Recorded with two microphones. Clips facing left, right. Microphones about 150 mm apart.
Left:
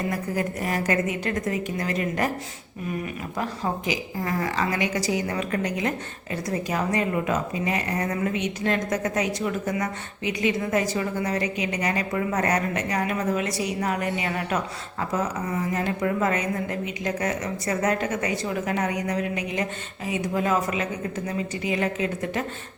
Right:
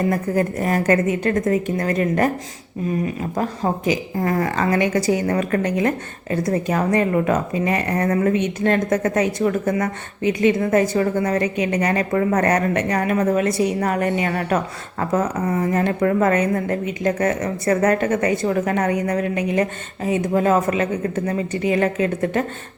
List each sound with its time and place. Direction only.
0.1 s a woman's voice: 45° right (ahead or behind)
3.3 s a woman's voice: 45° right (ahead or behind)